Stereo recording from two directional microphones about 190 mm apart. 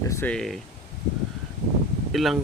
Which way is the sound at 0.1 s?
10° left (ahead or behind).